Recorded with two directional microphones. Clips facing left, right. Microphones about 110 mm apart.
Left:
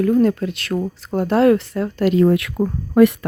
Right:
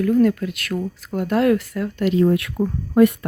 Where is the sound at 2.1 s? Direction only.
80° left.